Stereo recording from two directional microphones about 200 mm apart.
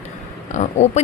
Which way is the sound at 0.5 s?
35° left (ahead or behind).